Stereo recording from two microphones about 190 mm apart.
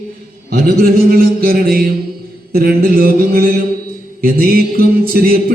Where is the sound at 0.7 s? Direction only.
50° right (ahead or behind).